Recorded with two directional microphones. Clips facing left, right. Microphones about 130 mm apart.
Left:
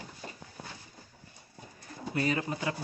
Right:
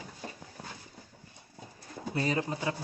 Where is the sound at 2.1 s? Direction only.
30° right (ahead or behind).